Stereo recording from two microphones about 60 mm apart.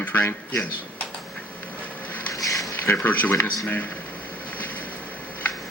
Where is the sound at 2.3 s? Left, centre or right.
Left.